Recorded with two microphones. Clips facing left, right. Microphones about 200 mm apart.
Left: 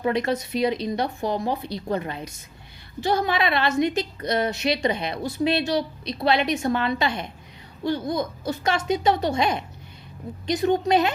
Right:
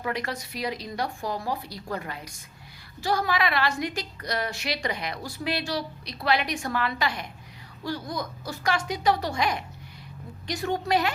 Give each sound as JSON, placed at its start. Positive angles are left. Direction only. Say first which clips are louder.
{"t": 0.0, "sound": "a woman's voice", "louder": "left 8 dB", "side_deg": 25}